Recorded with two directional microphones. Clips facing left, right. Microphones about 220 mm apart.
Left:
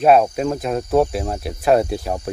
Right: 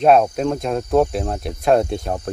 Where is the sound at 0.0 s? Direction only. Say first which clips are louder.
Even; 5° left (ahead or behind).